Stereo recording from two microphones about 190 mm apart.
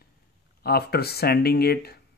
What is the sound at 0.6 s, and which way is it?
Speech, 55° left (ahead or behind).